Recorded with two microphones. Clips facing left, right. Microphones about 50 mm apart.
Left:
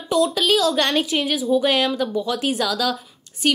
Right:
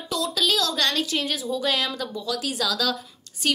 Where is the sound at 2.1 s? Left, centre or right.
Left.